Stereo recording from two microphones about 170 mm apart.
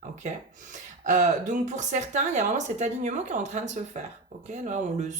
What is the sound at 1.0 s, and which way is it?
Speech, 45° right (ahead or behind).